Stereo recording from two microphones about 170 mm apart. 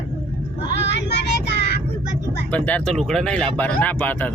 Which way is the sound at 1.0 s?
80° left.